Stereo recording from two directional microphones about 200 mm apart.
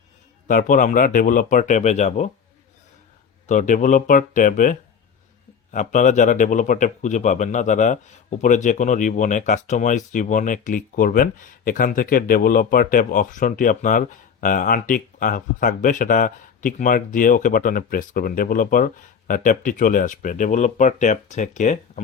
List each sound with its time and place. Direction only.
0.4 s speech: 40° left (ahead or behind)
3.4 s speech: 40° left (ahead or behind)